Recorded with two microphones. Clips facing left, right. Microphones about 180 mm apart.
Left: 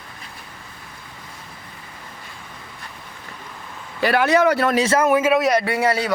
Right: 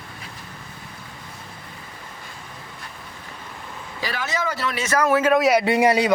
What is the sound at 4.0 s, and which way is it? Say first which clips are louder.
Speech: left 11 dB; 60° left (ahead or behind).